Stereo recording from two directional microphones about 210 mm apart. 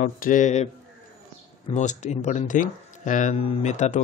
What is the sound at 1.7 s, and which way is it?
A man's voice, 35° left (ahead or behind).